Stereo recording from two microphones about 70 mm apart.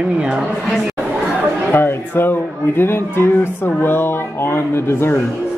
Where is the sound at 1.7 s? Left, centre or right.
Left.